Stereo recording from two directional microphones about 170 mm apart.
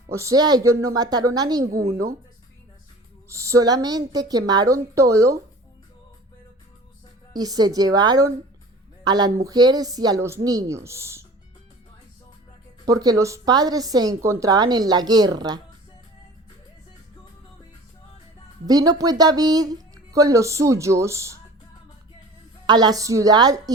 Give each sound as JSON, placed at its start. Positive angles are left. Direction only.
{"t": 0.1, "sound": "a woman's voice", "side_deg": -20}
{"t": 3.2, "sound": "a woman's voice", "side_deg": -20}
{"t": 7.3, "sound": "a woman's voice", "side_deg": -20}
{"t": 12.8, "sound": "a woman's voice", "side_deg": -20}
{"t": 18.6, "sound": "a woman's voice", "side_deg": -20}
{"t": 22.6, "sound": "a woman's voice", "side_deg": -25}